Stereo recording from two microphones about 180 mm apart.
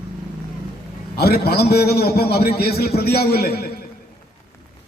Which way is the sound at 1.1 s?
60° left (ahead or behind).